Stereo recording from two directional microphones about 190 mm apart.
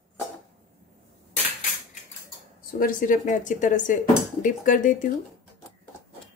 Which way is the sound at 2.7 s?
45° left (ahead or behind).